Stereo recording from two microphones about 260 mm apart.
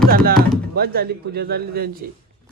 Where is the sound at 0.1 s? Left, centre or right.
Right.